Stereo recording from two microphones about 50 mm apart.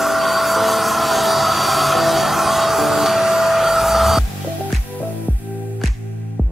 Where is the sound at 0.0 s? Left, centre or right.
Centre.